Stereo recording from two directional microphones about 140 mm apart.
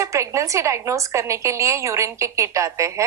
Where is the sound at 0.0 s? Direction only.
20° right (ahead or behind).